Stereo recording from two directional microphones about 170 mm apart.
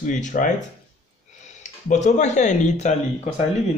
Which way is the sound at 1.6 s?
45° left (ahead or behind).